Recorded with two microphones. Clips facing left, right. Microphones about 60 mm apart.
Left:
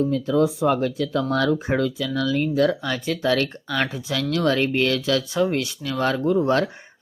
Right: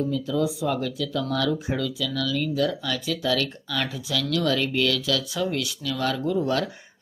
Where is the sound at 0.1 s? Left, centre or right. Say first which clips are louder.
Left 5 dB; left.